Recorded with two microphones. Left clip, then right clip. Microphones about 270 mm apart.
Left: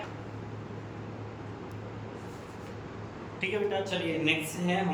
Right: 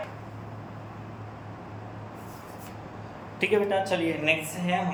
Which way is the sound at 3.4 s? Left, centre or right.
Right.